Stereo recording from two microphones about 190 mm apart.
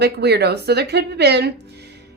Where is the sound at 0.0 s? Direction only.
60° right (ahead or behind).